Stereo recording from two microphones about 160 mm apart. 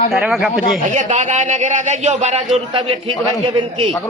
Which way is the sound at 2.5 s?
35° right (ahead or behind).